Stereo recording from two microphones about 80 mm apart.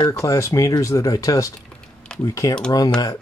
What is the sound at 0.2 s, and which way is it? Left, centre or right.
Speech, left.